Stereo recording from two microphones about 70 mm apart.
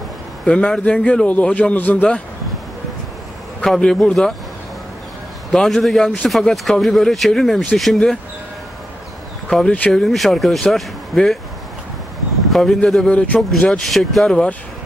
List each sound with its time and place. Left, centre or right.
0.5 s a man's voice: centre
3.6 s a man's voice: centre
5.5 s speech: centre
9.5 s speech: centre
12.4 s a man's voice: centre